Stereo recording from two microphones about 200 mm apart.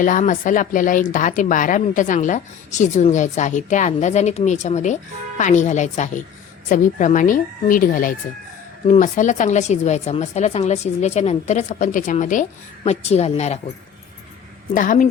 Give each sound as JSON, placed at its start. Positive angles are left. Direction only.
{"t": 0.0, "sound": "speech", "side_deg": 40}
{"t": 14.7, "sound": "speech", "side_deg": 40}